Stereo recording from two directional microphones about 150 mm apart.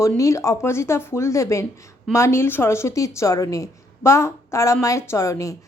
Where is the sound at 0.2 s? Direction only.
20° left (ahead or behind).